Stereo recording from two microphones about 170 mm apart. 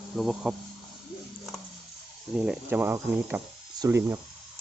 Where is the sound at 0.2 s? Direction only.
5° right (ahead or behind).